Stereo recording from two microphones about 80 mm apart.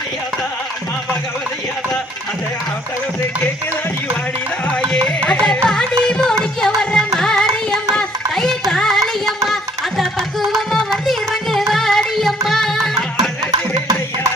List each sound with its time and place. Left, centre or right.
4.9 s carnatic music: centre
7.4 s carnatic music: right
7.9 s music: centre
10.5 s music: centre